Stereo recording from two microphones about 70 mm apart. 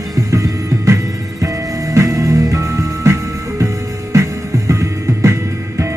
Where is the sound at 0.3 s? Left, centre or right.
Right.